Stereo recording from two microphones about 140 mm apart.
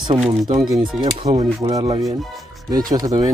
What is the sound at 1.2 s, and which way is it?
Speech, 40° right (ahead or behind).